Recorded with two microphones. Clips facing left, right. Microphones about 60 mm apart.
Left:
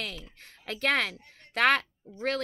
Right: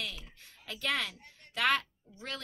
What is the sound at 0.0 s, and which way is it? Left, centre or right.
Speech, left.